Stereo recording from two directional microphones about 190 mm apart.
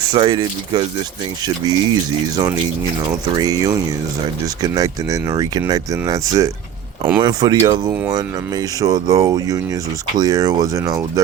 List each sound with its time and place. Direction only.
0.1 s speech: 25° right (ahead or behind)